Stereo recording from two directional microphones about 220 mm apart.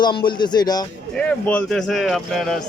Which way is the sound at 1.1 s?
5° left (ahead or behind).